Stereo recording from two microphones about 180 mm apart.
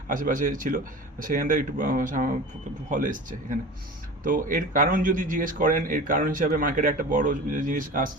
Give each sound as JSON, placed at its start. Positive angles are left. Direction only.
{"t": 0.1, "sound": "a man's voice", "side_deg": -50}